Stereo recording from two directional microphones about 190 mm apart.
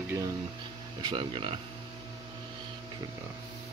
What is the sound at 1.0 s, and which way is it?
Speech, 25° right (ahead or behind).